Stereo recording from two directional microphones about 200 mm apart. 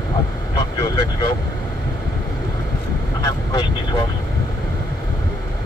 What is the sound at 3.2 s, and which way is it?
Vehicle, 20° left (ahead or behind).